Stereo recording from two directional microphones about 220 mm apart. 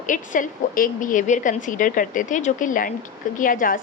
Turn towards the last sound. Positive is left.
turn(degrees=40)  # may be behind; listen again after turning